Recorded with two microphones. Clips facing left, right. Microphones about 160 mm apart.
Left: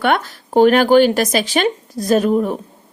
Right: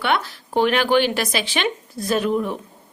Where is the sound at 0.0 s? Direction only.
45° left (ahead or behind).